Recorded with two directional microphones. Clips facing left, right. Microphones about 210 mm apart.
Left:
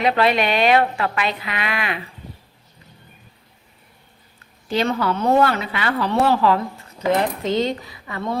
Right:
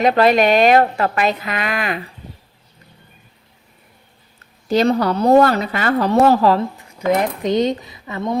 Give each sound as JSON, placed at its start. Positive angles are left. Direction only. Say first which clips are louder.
{"t": 0.0, "sound": "a woman's voice", "louder": "right 5 dB", "side_deg": -45}
{"t": 4.7, "sound": "a woman's voice", "louder": "right 5 dB", "side_deg": -40}
{"t": 6.7, "sound": "a sound", "louder": "even", "side_deg": -15}
{"t": 7.1, "sound": "speech", "louder": "right 3 dB", "side_deg": -20}